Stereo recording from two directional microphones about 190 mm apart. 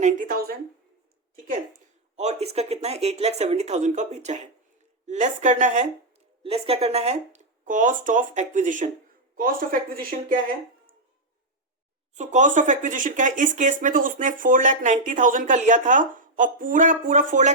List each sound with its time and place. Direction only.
0.0 s speech: 45° right (ahead or behind)
12.1 s speech: 40° right (ahead or behind)